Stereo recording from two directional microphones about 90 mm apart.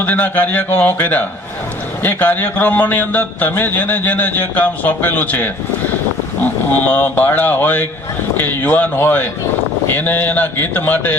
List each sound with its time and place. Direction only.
0.0 s a man's voice: 20° left (ahead or behind)